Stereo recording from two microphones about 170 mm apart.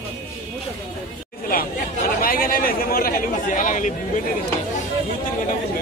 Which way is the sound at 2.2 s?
60° left (ahead or behind).